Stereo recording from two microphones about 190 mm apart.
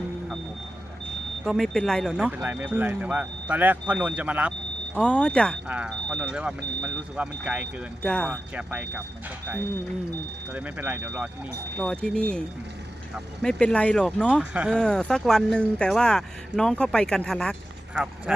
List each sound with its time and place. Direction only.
1.5 s speech: centre (ahead or behind)
2.2 s speech: 10° right (ahead or behind)
4.9 s speech: 5° left (ahead or behind)
5.6 s speech: 5° right (ahead or behind)
8.0 s speech: 5° left (ahead or behind)
10.5 s speech: 10° right (ahead or behind)
11.8 s speech: 5° left (ahead or behind)